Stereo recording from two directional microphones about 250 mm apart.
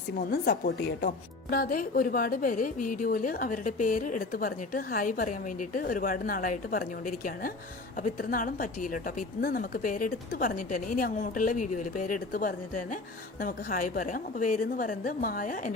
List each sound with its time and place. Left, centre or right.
0.2 s speech: left